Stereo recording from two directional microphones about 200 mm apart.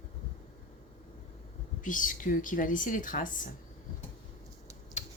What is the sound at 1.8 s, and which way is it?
Speech, 40° left (ahead or behind).